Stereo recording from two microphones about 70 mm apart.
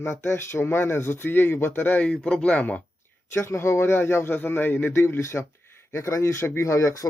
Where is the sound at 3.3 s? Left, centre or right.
Left.